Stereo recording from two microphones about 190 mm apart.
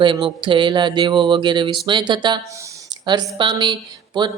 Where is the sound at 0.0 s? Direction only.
25° right (ahead or behind).